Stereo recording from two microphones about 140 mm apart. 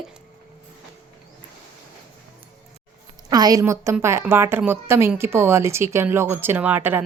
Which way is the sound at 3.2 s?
30° right (ahead or behind).